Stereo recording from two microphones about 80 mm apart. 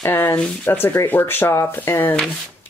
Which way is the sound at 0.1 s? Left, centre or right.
Left.